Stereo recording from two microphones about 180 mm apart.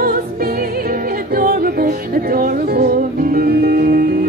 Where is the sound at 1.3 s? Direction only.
55° right (ahead or behind).